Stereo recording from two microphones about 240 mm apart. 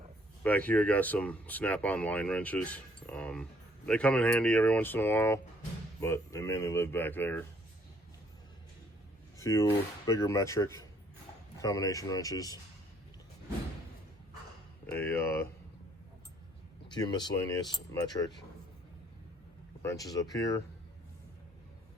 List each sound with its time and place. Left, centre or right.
0.4 s speech: centre
9.4 s speech: centre
14.9 s speech: centre
16.9 s speech: centre
19.8 s speech: centre